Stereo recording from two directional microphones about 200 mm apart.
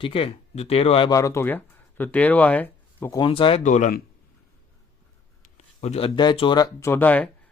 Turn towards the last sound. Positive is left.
turn(degrees=10)  # may be behind; listen again after turning